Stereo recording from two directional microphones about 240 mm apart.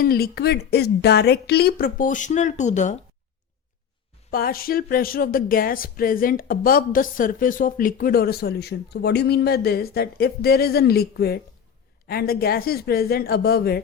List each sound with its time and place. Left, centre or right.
0.0 s speech: left
4.3 s speech: left